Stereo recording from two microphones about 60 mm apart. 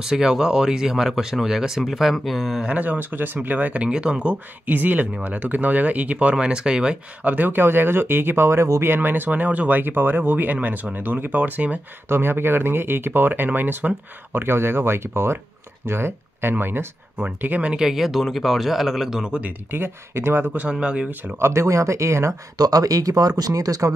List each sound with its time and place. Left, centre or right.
0.0 s speech: centre
2.6 s speech: right
4.6 s speech: right
7.2 s speech: right
8.8 s speech: right
12.1 s speech: right
17.2 s speech: right
17.7 s speech: centre
19.2 s speech: centre
19.7 s speech: right
20.7 s speech: centre
21.4 s speech: right
22.6 s speech: right